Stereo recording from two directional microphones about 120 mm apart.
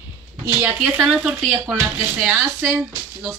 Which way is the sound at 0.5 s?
15° right (ahead or behind).